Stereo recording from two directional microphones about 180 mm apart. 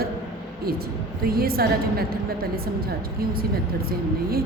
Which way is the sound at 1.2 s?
55° right (ahead or behind).